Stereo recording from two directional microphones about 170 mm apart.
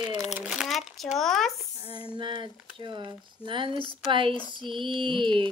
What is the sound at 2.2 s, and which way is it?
Speech, 30° right (ahead or behind).